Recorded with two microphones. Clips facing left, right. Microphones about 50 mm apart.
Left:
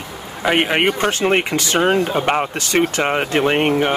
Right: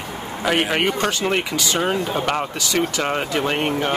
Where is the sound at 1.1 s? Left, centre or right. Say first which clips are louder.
Left 4 dB; left.